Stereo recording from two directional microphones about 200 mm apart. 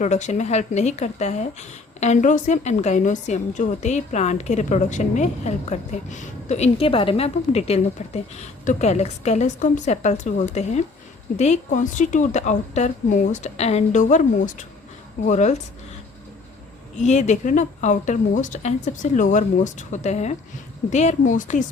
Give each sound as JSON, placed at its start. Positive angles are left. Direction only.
{"t": 0.0, "sound": "a woman's voice", "side_deg": 35}
{"t": 17.0, "sound": "a woman's voice", "side_deg": 35}